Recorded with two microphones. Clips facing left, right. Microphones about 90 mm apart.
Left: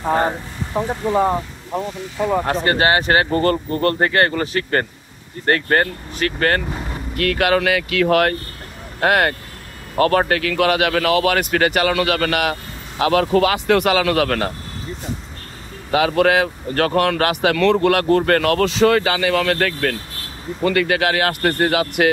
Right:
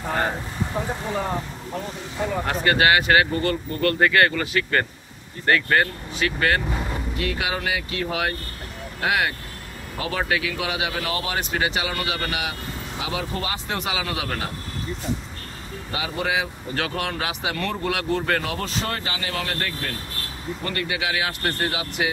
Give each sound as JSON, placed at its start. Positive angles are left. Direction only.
{"t": 0.0, "sound": "speech", "side_deg": 30}
{"t": 2.4, "sound": "speech", "side_deg": 35}
{"t": 7.2, "sound": "a man's voice", "side_deg": 60}
{"t": 10.5, "sound": "a man's voice", "side_deg": 65}
{"t": 15.9, "sound": "a man's voice", "side_deg": 70}
{"t": 17.9, "sound": "speech", "side_deg": 55}
{"t": 20.7, "sound": "a man's voice", "side_deg": 65}